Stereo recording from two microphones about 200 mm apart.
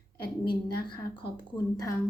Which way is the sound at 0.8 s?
20° left (ahead or behind).